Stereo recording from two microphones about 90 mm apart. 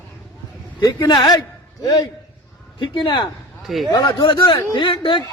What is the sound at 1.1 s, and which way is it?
Speech, 50° left (ahead or behind).